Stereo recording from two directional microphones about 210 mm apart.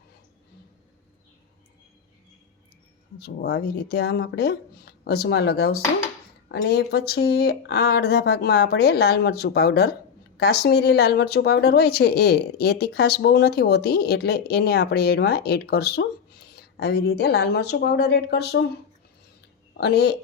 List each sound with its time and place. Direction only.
3.2 s speech: 50° left (ahead or behind)
19.8 s speech: 50° left (ahead or behind)